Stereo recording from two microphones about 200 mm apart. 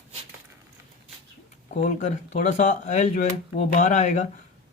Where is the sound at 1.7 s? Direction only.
40° left (ahead or behind).